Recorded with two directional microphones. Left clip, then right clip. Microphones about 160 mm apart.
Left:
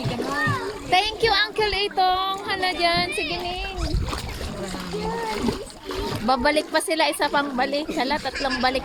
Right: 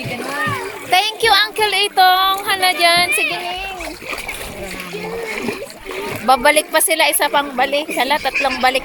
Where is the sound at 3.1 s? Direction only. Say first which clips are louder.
Right 8 dB; 15° left (ahead or behind).